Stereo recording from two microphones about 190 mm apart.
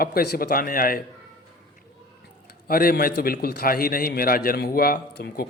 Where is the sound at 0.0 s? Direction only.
55° left (ahead or behind).